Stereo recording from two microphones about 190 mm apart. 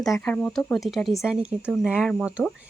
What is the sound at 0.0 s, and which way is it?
Speech, 5° left (ahead or behind).